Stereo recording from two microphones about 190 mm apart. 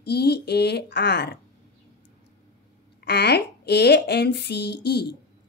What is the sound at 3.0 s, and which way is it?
Speech, 60° left (ahead or behind).